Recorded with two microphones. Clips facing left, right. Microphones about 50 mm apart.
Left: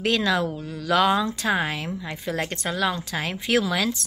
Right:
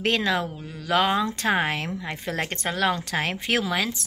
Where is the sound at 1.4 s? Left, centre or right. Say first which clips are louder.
Right 1 dB; right.